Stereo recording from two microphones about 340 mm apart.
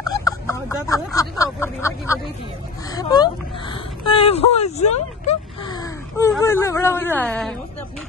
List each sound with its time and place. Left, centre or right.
0.0 s speech: centre